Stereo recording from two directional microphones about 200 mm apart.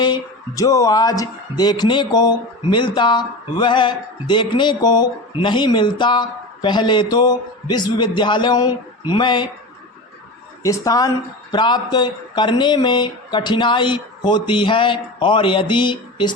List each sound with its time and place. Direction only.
0.0 s speech: 20° left (ahead or behind)
10.6 s a woman's voice: 15° left (ahead or behind)